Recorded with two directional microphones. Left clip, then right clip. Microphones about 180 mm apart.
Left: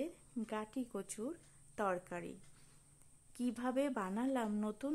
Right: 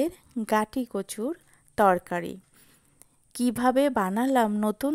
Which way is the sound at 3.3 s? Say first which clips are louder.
Right 15 dB; 50° right (ahead or behind).